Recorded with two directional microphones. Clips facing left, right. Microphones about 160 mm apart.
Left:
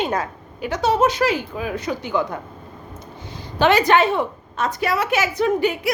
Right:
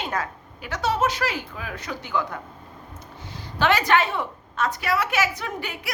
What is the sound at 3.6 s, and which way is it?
A woman's voice, 20° left (ahead or behind).